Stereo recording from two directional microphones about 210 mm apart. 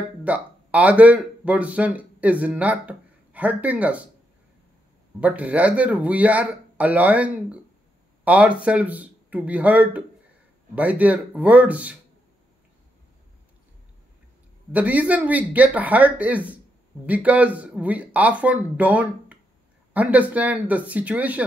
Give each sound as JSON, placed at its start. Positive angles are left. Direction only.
{"t": 0.2, "sound": "speech", "side_deg": -5}
{"t": 5.2, "sound": "speech", "side_deg": -5}
{"t": 14.7, "sound": "speech", "side_deg": -5}